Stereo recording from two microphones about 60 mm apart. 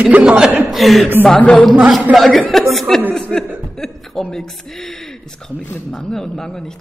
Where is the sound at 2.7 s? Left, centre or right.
Centre.